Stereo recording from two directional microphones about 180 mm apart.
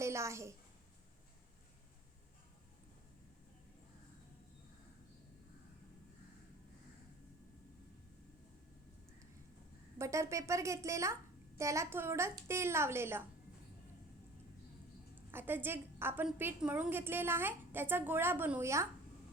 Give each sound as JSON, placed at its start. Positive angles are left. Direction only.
{"t": 0.0, "sound": "a woman's voice", "side_deg": -15}
{"t": 10.0, "sound": "a woman's voice", "side_deg": -15}
{"t": 15.3, "sound": "a woman's voice", "side_deg": -10}